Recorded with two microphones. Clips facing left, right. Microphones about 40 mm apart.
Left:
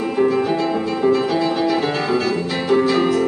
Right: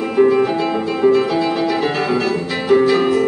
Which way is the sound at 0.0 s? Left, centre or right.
Centre.